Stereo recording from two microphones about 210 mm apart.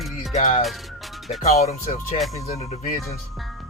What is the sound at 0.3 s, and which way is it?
Speech, 35° left (ahead or behind).